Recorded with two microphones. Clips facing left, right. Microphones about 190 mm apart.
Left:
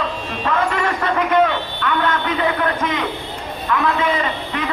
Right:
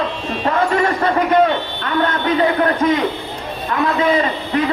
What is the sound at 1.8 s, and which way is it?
A man's voice, 40° right (ahead or behind).